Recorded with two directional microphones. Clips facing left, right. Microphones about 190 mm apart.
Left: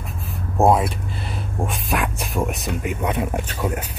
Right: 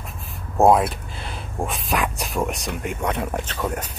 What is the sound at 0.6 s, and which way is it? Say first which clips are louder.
Speech: right 1 dB; centre (ahead or behind).